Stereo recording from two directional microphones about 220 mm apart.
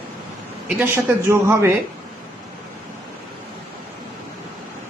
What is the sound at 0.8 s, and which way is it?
Speech, 10° right (ahead or behind).